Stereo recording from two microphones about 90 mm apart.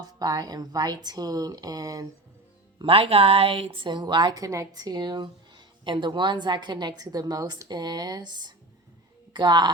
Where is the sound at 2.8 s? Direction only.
90° right.